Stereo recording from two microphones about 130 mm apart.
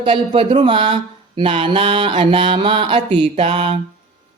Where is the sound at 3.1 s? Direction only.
45° right (ahead or behind).